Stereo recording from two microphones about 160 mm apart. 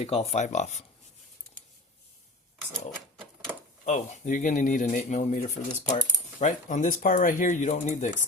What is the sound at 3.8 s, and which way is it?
Speech, 50° left (ahead or behind).